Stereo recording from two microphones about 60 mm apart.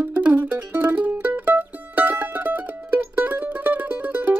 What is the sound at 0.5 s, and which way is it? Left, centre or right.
Mandolin, right.